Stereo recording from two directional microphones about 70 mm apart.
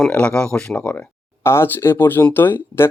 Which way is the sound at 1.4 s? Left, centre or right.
Left.